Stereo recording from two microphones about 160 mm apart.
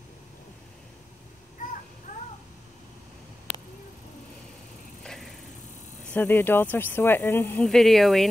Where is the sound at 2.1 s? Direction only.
50° left (ahead or behind).